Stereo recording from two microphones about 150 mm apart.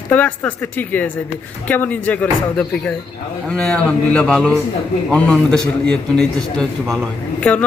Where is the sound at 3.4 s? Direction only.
5° left (ahead or behind).